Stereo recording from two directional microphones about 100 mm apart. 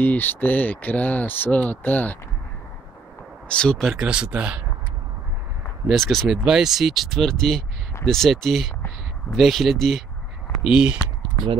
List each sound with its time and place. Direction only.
0.0 s speech: 20° left (ahead or behind)
3.4 s speech: 10° left (ahead or behind)
3.8 s speech: 5° right (ahead or behind)
5.9 s speech: centre (ahead or behind)